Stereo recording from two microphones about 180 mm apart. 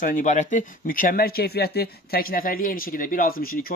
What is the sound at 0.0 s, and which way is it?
Speech, 45° left (ahead or behind).